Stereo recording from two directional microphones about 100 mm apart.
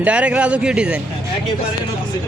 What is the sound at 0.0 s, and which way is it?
Speech, 10° right (ahead or behind).